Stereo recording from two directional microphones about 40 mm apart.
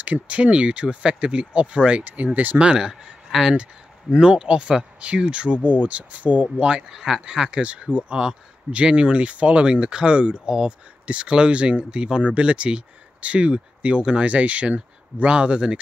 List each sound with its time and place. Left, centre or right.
0.0 s speech: right
2.3 s speech: right
2.6 s speech: centre
4.1 s speech: right
6.9 s speech: centre
7.2 s speech: right